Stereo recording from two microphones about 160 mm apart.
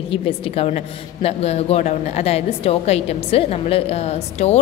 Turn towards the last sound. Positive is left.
turn(degrees=40)  # may be behind; listen again after turning